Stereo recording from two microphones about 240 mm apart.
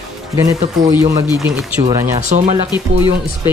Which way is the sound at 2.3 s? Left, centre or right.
Right.